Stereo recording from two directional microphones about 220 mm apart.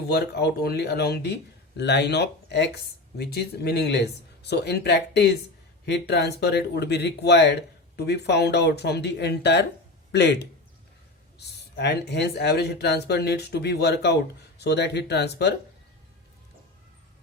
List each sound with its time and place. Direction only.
0.1 s speech: 45° left (ahead or behind)